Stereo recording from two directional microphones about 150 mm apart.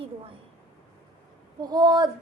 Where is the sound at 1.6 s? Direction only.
30° right (ahead or behind).